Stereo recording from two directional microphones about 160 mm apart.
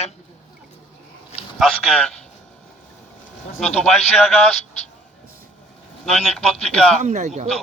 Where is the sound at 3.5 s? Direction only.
5° left (ahead or behind).